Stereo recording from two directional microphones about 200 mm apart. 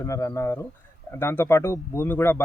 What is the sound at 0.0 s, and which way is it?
Speech, 15° left (ahead or behind).